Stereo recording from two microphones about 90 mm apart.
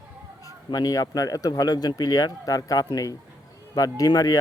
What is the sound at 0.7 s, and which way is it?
Speech, 45° left (ahead or behind).